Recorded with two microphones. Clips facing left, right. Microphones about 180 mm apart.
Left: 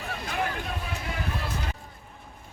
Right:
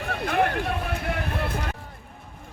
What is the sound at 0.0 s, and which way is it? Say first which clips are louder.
Vehicle: right 7 dB; 60° right (ahead or behind).